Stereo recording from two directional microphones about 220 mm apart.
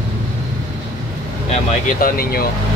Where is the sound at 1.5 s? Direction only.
35° left (ahead or behind).